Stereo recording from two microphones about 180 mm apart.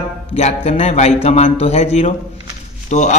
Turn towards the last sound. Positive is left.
turn(degrees=40)  # may be behind; listen again after turning